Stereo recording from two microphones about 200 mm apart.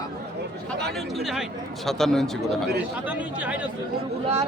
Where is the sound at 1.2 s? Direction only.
Centre (ahead or behind).